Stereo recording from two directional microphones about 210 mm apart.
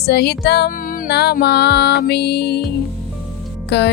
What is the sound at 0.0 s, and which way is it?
Music, 50° left (ahead or behind).